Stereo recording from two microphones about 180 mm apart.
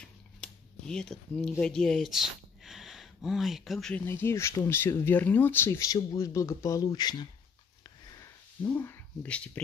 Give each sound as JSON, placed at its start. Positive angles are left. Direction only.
{"t": 0.0, "sound": "a sound", "side_deg": 5}
{"t": 4.0, "sound": "speech", "side_deg": 15}
{"t": 8.6, "sound": "speech", "side_deg": 10}